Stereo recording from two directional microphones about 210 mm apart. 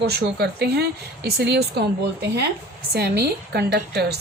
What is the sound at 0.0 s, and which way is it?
A woman's voice, 50° right (ahead or behind).